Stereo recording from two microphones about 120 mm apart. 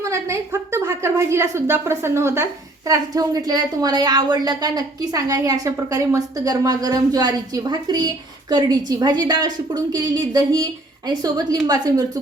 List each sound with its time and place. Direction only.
0.0 s a woman's voice: 25° right (ahead or behind)